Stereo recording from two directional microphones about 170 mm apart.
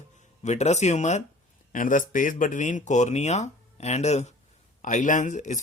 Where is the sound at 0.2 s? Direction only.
40° left (ahead or behind).